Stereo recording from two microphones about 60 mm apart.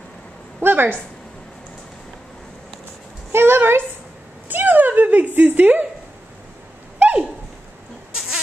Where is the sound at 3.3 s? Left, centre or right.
Right.